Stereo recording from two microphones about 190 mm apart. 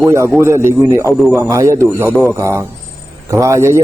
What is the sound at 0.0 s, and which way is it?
A man's voice, 15° right (ahead or behind).